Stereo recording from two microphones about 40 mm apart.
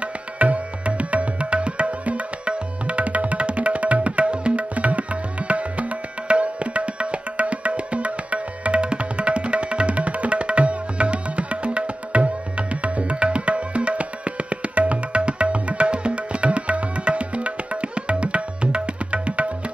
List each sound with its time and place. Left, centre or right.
0.0 s music: right